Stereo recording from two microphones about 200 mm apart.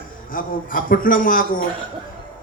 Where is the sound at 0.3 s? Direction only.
45° left (ahead or behind).